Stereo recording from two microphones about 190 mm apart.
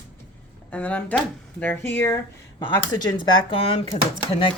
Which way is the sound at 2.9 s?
25° left (ahead or behind).